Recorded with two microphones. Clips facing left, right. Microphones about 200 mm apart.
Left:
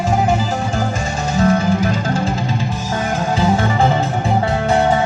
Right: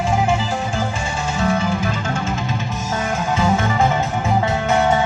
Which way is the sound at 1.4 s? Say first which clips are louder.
Left 5 dB; 40° left (ahead or behind).